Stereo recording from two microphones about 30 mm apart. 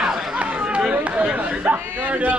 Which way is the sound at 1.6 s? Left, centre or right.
Right.